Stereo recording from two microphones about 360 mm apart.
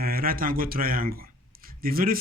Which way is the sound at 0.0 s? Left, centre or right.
Right.